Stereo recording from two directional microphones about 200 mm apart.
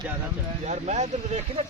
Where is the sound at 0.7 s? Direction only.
35° right (ahead or behind).